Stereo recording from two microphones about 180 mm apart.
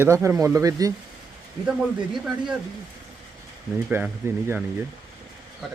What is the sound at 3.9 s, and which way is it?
Speech, 10° right (ahead or behind).